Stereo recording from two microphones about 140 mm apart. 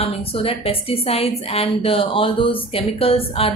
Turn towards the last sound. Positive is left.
turn(degrees=45)  # may be behind; listen again after turning